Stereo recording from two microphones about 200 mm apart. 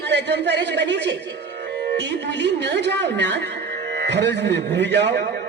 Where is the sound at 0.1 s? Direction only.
60° right (ahead or behind).